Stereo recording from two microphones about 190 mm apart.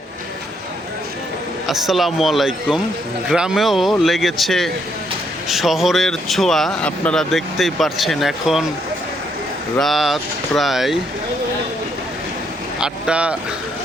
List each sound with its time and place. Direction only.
1.6 s speech: centre (ahead or behind)
9.7 s speech: centre (ahead or behind)
12.8 s speech: 5° right (ahead or behind)